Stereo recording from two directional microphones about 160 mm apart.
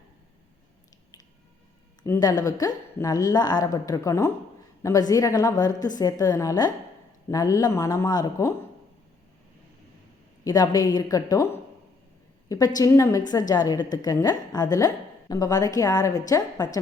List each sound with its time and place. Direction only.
2.0 s a woman's voice: 20° left (ahead or behind)
10.4 s a woman's voice: 25° left (ahead or behind)